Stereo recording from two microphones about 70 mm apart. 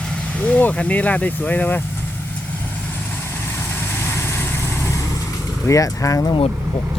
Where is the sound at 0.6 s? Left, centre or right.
Left.